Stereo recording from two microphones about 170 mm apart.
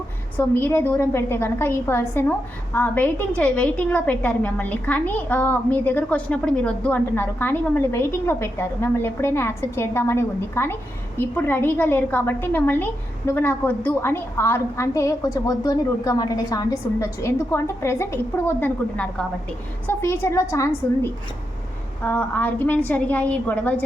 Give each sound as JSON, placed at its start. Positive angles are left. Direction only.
{"t": 0.3, "sound": "a woman's voice", "side_deg": 15}